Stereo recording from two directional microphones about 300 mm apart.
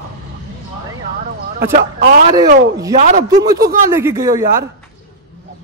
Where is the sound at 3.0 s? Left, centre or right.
Right.